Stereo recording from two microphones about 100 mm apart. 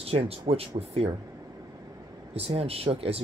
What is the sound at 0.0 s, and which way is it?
Speech, 80° right.